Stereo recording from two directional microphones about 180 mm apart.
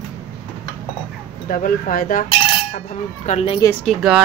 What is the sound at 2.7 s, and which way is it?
Speech, 35° left (ahead or behind).